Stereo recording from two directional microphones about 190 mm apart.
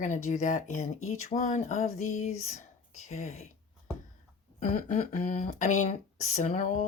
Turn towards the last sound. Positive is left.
turn(degrees=40)  # may be behind; listen again after turning